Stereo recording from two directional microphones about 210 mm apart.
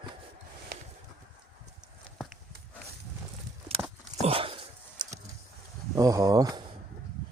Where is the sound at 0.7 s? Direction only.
45° right (ahead or behind).